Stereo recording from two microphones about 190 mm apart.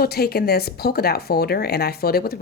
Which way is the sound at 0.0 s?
55° left (ahead or behind).